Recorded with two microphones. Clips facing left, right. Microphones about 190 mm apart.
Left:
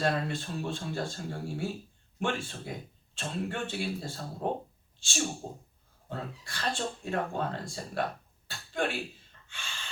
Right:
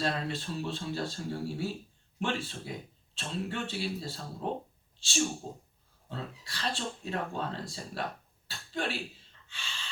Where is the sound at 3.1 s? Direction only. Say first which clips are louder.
Left 1 dB; 50° left (ahead or behind).